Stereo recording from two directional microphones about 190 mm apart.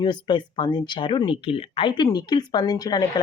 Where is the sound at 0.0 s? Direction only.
25° left (ahead or behind).